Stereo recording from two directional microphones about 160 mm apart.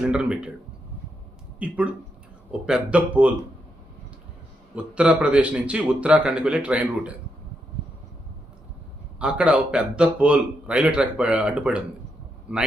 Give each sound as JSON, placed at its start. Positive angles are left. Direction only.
{"t": 0.0, "sound": "speech", "side_deg": -5}
{"t": 1.5, "sound": "a man's voice", "side_deg": -5}
{"t": 4.7, "sound": "a man's voice", "side_deg": -5}
{"t": 9.1, "sound": "a man's voice", "side_deg": -5}